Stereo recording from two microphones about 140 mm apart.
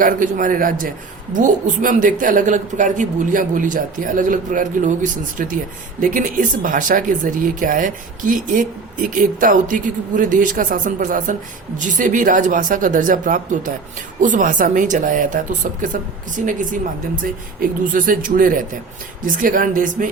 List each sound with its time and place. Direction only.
0.0 s speech: 70° right (ahead or behind)
1.4 s speech: 65° right (ahead or behind)
17.6 s speech: 75° right (ahead or behind)